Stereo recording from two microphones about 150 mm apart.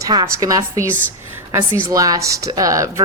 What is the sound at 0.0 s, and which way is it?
A woman's voice, 25° right (ahead or behind).